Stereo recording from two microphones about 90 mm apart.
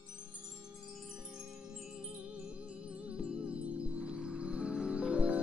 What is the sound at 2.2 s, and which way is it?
Music, 10° right (ahead or behind).